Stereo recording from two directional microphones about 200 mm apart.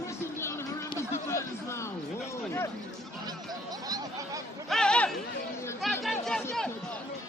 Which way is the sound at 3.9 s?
15° right (ahead or behind).